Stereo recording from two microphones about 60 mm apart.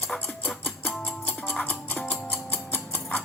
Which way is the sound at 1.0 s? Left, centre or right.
Left.